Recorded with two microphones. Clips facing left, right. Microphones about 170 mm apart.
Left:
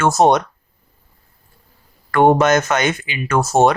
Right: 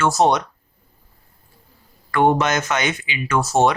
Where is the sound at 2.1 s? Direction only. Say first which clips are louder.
Left 5 dB; 45° left (ahead or behind).